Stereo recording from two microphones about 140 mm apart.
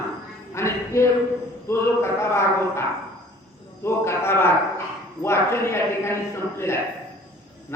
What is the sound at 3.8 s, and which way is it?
A man's voice, 20° left (ahead or behind).